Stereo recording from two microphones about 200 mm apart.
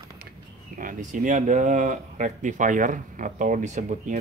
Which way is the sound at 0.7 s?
40° right (ahead or behind).